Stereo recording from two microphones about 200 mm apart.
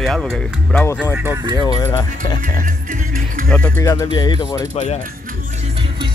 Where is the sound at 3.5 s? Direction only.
10° left (ahead or behind).